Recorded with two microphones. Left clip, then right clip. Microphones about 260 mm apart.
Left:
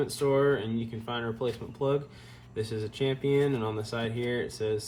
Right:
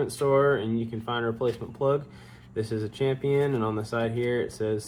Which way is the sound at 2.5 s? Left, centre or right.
Centre.